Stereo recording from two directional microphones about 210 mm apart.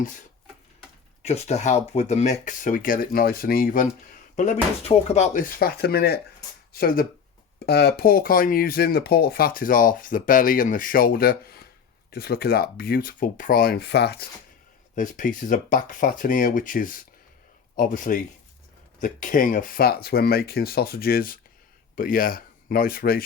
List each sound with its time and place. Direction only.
1.2 s speech: 30° left (ahead or behind); by 14.3 s 50° left (ahead or behind)
14.9 s speech: 40° left (ahead or behind)